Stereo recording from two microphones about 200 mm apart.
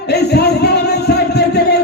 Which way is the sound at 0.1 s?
55° left (ahead or behind).